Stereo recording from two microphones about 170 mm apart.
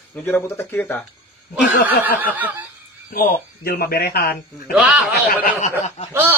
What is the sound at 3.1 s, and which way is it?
Speech, 55° left (ahead or behind).